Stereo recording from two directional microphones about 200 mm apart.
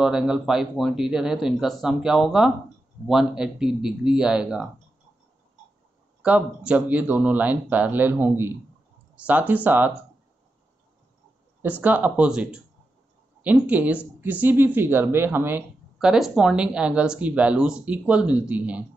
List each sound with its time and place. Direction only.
0.0 s speech: 5° right (ahead or behind)
6.2 s speech: 5° right (ahead or behind)
11.6 s speech: 10° right (ahead or behind)